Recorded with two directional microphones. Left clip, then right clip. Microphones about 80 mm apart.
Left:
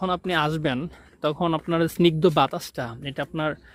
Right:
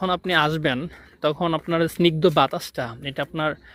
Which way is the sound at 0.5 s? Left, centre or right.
Left.